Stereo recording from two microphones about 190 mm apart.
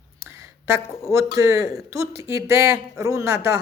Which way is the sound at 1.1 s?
15° right (ahead or behind).